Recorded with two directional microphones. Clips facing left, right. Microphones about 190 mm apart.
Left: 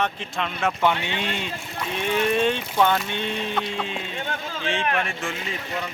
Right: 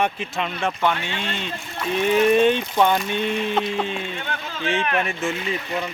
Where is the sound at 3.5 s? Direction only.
35° right (ahead or behind).